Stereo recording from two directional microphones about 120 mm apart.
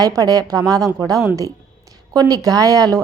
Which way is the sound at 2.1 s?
30° right (ahead or behind).